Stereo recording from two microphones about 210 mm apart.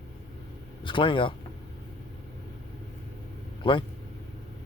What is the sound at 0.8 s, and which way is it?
Speech, 25° left (ahead or behind).